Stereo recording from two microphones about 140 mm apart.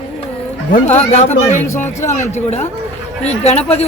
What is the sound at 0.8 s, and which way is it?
Speech, 55° left (ahead or behind).